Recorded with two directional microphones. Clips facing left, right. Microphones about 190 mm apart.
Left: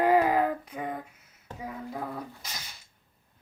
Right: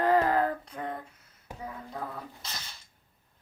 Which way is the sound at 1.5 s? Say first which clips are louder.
Left 3 dB; 10° left (ahead or behind).